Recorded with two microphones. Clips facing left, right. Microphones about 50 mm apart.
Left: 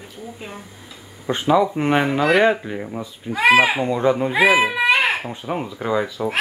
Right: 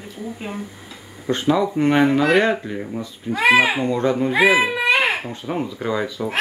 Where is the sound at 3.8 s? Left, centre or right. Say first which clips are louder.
Left 1 dB; centre.